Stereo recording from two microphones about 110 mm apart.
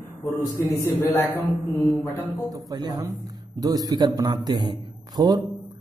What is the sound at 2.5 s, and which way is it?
A man's voice, 35° right (ahead or behind).